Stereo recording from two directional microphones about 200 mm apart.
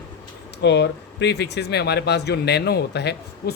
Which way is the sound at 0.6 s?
60° left (ahead or behind).